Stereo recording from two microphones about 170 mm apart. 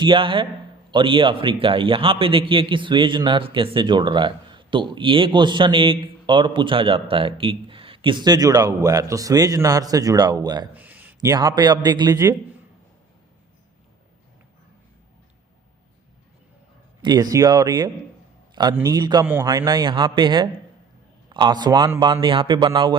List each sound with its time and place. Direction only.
0.0 s a man's voice: 30° right (ahead or behind)
10.8 s a sound: 10° right (ahead or behind)
11.2 s a man's voice: 20° right (ahead or behind)
17.0 s a man's voice: 25° right (ahead or behind)
18.9 s a man's voice: 25° right (ahead or behind)
19.2 s a man's voice: 10° right (ahead or behind)
19.5 s a man's voice: 25° right (ahead or behind)